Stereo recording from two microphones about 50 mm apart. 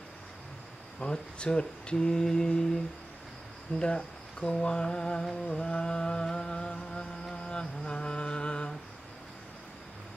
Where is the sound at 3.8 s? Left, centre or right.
Centre.